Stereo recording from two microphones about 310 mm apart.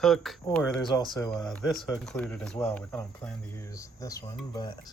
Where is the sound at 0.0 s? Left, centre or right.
Centre.